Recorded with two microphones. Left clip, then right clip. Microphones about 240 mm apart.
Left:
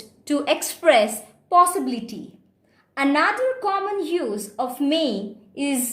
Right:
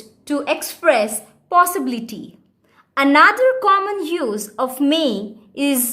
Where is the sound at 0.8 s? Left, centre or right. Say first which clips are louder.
Right 1 dB; centre.